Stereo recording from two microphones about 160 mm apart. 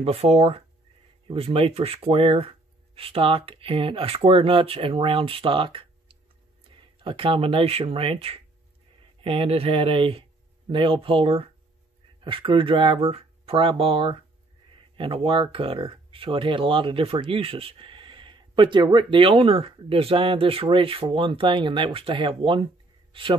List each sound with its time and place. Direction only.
0.0 s speech: 40° right (ahead or behind)